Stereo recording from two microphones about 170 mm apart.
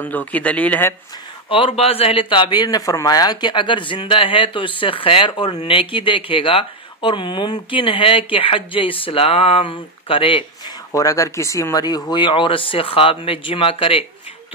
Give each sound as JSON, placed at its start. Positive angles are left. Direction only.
{"t": 0.0, "sound": "speech", "side_deg": 10}
{"t": 1.5, "sound": "a man's voice", "side_deg": 30}
{"t": 10.9, "sound": "speech", "side_deg": 20}